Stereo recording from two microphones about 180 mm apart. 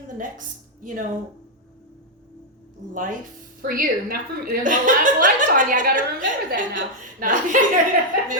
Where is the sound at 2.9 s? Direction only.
50° right (ahead or behind).